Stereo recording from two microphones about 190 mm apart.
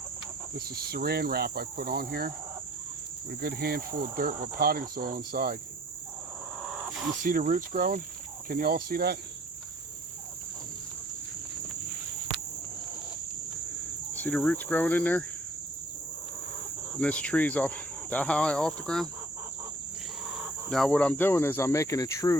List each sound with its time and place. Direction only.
0.5 s cricket: 55° right (ahead or behind)
3.4 s cricket: 55° right (ahead or behind)
7.3 s cricket: 45° right (ahead or behind)
14.1 s speech: 10° left (ahead or behind)
17.0 s speech: 5° left (ahead or behind)
20.7 s speech: centre (ahead or behind); by 22.4 s 20° left (ahead or behind)